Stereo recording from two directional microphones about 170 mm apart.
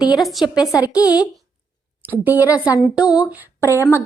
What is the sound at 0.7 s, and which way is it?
Speech, 20° left (ahead or behind).